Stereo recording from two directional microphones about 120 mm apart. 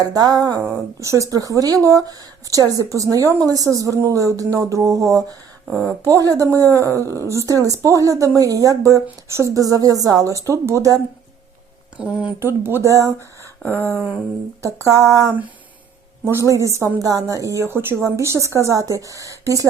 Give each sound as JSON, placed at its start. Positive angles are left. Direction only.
{"t": 0.0, "sound": "a sound", "side_deg": -30}
{"t": 0.9, "sound": "speech", "side_deg": -25}
{"t": 12.0, "sound": "speech", "side_deg": -10}
{"t": 12.4, "sound": "speech", "side_deg": -20}
{"t": 13.7, "sound": "a sound", "side_deg": 15}
{"t": 14.6, "sound": "speech", "side_deg": -25}